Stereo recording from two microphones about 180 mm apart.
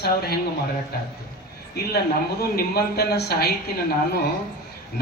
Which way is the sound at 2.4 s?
60° left (ahead or behind).